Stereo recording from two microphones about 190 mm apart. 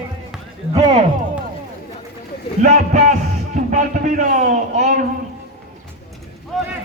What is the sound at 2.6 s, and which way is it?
Speech, 40° right (ahead or behind).